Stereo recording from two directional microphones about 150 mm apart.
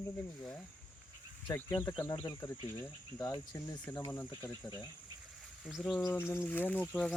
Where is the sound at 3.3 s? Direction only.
25° left (ahead or behind).